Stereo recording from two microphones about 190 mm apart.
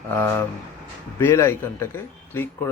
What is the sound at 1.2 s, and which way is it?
Speech, 15° left (ahead or behind).